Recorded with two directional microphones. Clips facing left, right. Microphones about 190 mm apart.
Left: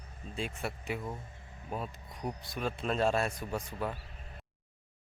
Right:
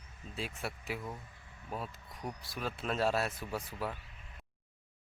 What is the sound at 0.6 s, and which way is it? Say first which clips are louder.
Speech: left 2 dB; centre (ahead or behind).